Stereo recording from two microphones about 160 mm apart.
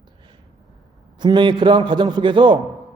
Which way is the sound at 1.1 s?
30° right (ahead or behind).